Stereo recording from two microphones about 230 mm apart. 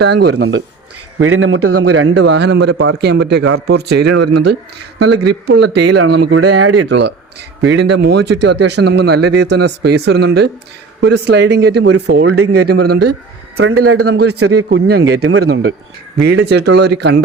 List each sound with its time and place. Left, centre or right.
0.0 s speech: right
0.3 s a man's voice: right
2.2 s speech: right
5.0 s speech: right
5.5 s speech: right
6.0 s speech: right
6.3 s speech: right
6.8 s speech: right
12.3 s a man's voice: right
12.6 s speech: right
13.6 s a man's voice: right
14.7 s speech: right
15.1 s a man's voice: right
15.4 s speech: right